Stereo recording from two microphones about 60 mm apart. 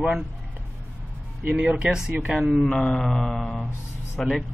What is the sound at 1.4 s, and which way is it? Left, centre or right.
Speech, right.